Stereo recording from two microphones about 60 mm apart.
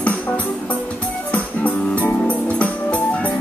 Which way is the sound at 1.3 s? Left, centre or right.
Left.